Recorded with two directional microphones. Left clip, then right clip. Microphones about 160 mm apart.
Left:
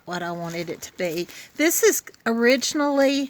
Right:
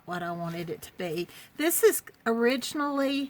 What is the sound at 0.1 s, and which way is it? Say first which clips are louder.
A woman's voice: left 5 dB; 45° left (ahead or behind).